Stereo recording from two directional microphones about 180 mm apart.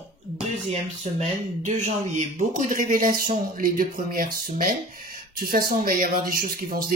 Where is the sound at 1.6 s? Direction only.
45° right (ahead or behind).